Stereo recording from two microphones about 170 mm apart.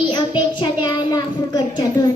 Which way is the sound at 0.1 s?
25° left (ahead or behind).